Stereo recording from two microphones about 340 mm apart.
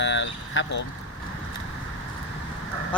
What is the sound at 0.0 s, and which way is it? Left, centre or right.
Vehicle, left.